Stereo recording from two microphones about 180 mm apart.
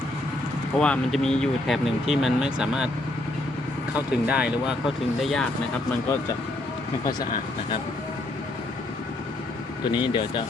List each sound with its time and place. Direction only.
0.8 s speech: 5° left (ahead or behind)
3.9 s speech: 5° right (ahead or behind)
9.9 s speech: 25° left (ahead or behind)